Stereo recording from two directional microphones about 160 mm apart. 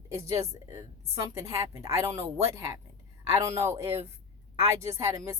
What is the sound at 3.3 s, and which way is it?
Speech, 20° right (ahead or behind).